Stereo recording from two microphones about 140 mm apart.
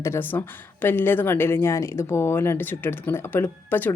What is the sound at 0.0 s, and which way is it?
Speech, 15° left (ahead or behind).